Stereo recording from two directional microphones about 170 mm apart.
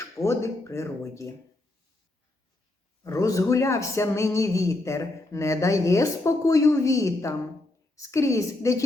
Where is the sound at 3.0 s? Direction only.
20° left (ahead or behind).